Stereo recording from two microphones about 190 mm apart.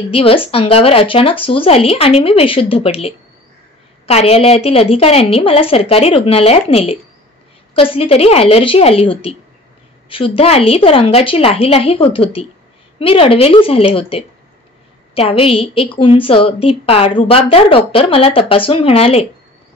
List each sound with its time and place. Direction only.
0.1 s a woman's voice: 30° left (ahead or behind)